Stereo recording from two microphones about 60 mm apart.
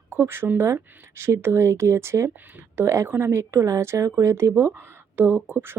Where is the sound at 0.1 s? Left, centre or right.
Right.